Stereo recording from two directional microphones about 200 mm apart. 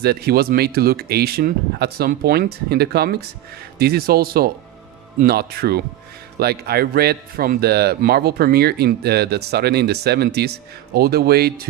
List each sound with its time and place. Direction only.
0.0 s a man's voice: 55° right (ahead or behind)